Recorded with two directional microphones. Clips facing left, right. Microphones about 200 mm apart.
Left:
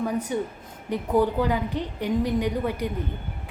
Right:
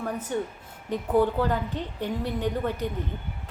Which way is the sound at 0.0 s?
10° left (ahead or behind).